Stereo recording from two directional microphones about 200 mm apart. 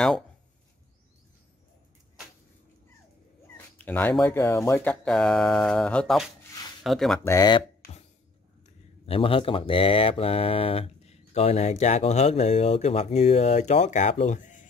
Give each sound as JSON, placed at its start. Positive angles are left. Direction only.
{"t": 3.7, "sound": "speech", "side_deg": 10}
{"t": 7.2, "sound": "speech", "side_deg": 20}
{"t": 8.6, "sound": "speech", "side_deg": 30}